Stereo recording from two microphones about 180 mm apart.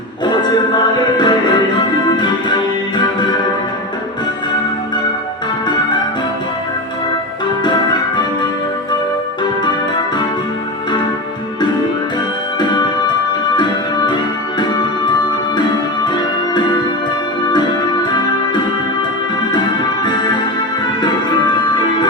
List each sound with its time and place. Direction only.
0.9 s music: 25° left (ahead or behind)
12.5 s music: 25° left (ahead or behind)
16.0 s music: 25° left (ahead or behind)